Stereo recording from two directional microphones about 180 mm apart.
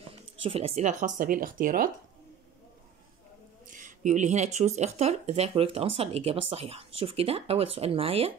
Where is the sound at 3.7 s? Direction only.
45° right (ahead or behind).